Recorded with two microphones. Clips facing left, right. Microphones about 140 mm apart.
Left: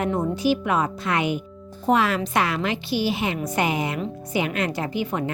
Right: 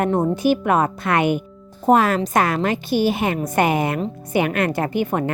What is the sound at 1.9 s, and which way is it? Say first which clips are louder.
A woman's voice: right 5 dB; 45° right (ahead or behind).